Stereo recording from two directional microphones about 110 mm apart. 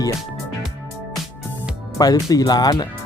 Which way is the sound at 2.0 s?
35° left (ahead or behind).